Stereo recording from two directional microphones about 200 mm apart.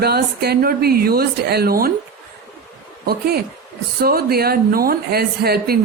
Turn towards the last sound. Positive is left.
turn(degrees=-50)  # may be behind; listen again after turning